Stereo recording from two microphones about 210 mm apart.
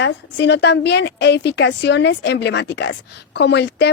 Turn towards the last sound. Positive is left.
turn(degrees=55)  # may be behind; listen again after turning